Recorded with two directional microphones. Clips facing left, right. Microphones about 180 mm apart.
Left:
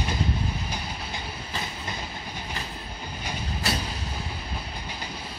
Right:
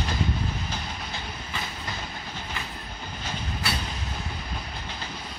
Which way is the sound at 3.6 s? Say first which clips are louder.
Left 3 dB; 40° left (ahead or behind).